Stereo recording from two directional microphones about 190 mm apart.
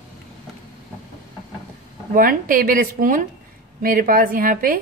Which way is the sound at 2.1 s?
45° right (ahead or behind).